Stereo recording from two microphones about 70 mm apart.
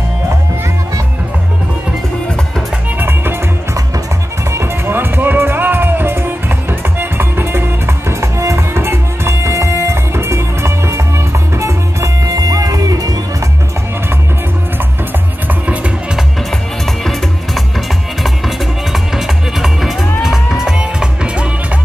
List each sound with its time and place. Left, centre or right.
2.2 s music: centre
3.0 s music: right
4.5 s music: right
4.9 s music: right
15.4 s music: right
16.8 s music: centre